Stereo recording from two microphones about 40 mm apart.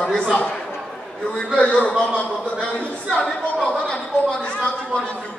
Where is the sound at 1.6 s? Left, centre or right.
Left.